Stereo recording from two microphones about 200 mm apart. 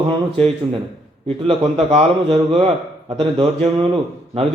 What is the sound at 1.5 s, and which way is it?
A man's voice, 30° right (ahead or behind).